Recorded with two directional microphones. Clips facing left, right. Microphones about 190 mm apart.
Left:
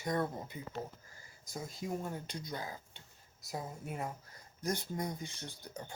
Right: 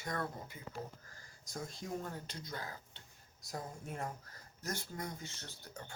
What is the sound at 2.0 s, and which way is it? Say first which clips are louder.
Speech: left 4 dB; 15° left (ahead or behind).